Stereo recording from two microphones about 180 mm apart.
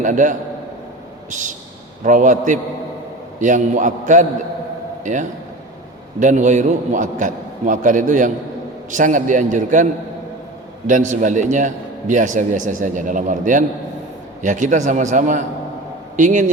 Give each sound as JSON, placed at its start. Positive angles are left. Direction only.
{"t": 0.0, "sound": "a man's voice", "side_deg": -45}
{"t": 10.8, "sound": "a man's voice", "side_deg": -45}